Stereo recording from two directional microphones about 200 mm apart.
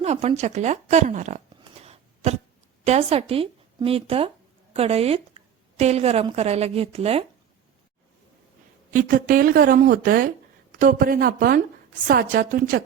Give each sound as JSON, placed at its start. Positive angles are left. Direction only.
{"t": 0.0, "sound": "speech", "side_deg": -30}
{"t": 1.8, "sound": "cough", "side_deg": -30}
{"t": 2.8, "sound": "a woman's voice", "side_deg": -30}
{"t": 8.9, "sound": "speech", "side_deg": -45}